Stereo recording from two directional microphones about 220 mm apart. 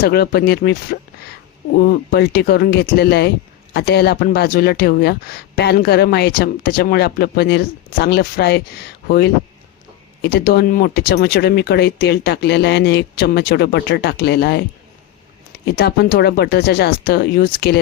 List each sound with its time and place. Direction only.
0.0 s speech: 45° left (ahead or behind)
15.6 s speech: 45° left (ahead or behind)